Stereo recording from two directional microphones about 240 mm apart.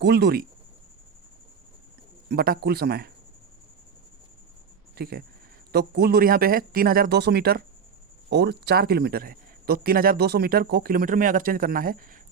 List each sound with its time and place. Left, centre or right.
0.0 s speech: right
2.3 s speech: right
4.9 s speech: right